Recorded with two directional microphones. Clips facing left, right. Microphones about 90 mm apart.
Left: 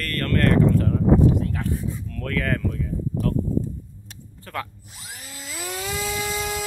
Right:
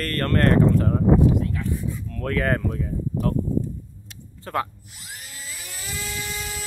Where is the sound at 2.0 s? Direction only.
25° right (ahead or behind).